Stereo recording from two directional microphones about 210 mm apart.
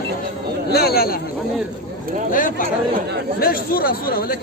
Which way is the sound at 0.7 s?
50° left (ahead or behind).